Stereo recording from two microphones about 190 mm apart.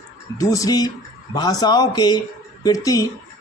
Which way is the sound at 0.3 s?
20° left (ahead or behind).